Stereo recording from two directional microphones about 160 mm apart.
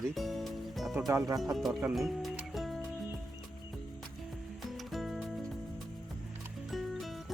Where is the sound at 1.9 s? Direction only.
Centre (ahead or behind).